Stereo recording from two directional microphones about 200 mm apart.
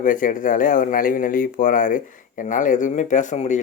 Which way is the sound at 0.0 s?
40° left (ahead or behind).